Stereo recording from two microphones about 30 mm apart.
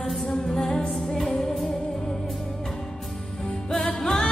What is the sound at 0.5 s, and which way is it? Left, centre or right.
Music, left.